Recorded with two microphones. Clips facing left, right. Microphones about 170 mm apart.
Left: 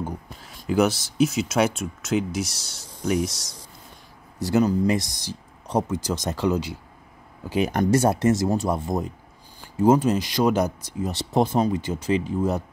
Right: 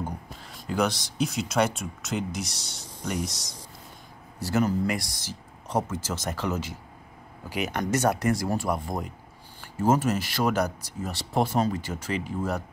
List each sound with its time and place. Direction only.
0.4 s speech: 5° left (ahead or behind)
4.4 s speech: 20° left (ahead or behind)
7.4 s speech: 30° left (ahead or behind)